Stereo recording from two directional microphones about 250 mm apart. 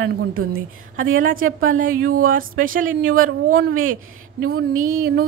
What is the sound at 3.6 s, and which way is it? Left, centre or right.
A woman's voice, right.